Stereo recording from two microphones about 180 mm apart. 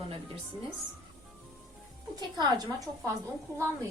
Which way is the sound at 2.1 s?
20° right (ahead or behind).